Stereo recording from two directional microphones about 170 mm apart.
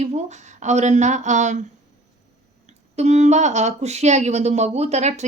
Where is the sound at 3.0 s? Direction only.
40° right (ahead or behind).